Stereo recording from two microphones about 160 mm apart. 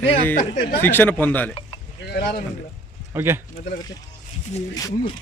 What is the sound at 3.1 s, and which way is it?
Speech, 15° right (ahead or behind).